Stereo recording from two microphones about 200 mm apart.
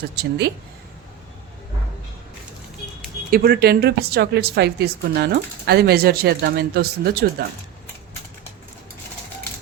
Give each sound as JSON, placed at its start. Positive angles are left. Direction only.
{"t": 0.2, "sound": "speech", "side_deg": -55}
{"t": 3.2, "sound": "a woman's voice", "side_deg": -45}